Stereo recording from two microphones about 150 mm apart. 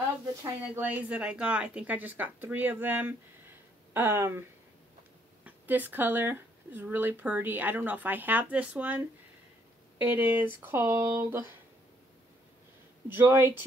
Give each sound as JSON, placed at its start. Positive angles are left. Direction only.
{"t": 0.7, "sound": "speech", "side_deg": -10}
{"t": 10.0, "sound": "speech", "side_deg": -10}
{"t": 13.1, "sound": "speech", "side_deg": -15}